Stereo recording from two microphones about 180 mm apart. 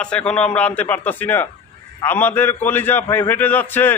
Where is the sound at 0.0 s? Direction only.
5° left (ahead or behind).